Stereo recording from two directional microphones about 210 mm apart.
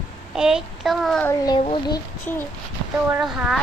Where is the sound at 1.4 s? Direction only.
25° left (ahead or behind).